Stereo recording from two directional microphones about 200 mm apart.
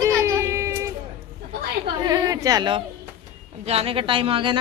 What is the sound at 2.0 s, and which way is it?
A woman's voice, 20° right (ahead or behind).